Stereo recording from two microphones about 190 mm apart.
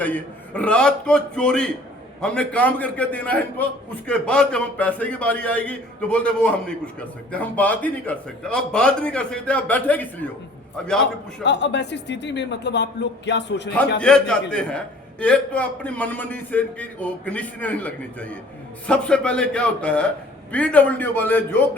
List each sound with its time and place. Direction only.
0.0 s a man's voice: 5° left (ahead or behind)
11.4 s speech: 65° left (ahead or behind)
14.0 s a man's voice: 5° left (ahead or behind)